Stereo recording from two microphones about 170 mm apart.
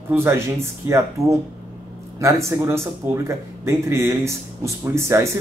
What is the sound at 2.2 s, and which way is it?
Speech, 20° right (ahead or behind).